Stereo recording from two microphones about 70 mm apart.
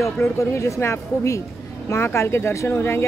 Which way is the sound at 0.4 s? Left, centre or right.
Left.